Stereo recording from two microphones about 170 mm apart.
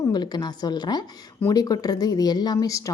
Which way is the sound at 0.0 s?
25° left (ahead or behind).